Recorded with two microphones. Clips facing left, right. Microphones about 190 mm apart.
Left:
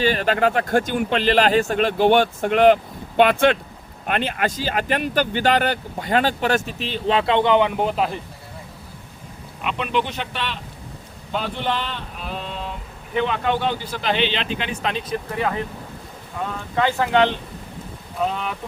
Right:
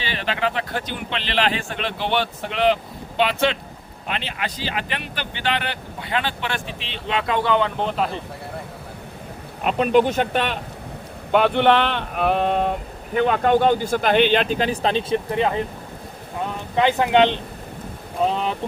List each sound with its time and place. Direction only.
0.0 s a man's voice: 45° left (ahead or behind); by 7.9 s 15° left (ahead or behind)
7.9 s a man's voice: centre (ahead or behind)
9.6 s speech: 40° right (ahead or behind)
11.3 s speech: 65° right (ahead or behind); by 15.5 s 25° right (ahead or behind)
16.7 s speech: 20° right (ahead or behind)